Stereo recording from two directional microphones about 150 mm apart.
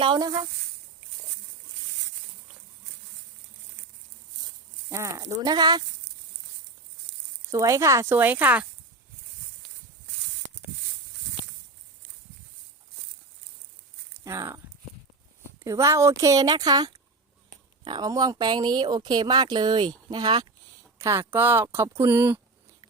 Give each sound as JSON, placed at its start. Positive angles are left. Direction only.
{"t": 0.0, "sound": "speech", "side_deg": -30}
{"t": 4.4, "sound": "a sound", "side_deg": -20}
{"t": 7.5, "sound": "speech", "side_deg": -20}
{"t": 14.3, "sound": "speech", "side_deg": -20}
{"t": 21.0, "sound": "speech", "side_deg": -15}